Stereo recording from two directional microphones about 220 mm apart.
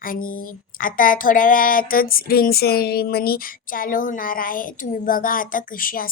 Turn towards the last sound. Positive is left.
turn(degrees=40)  # may be behind; listen again after turning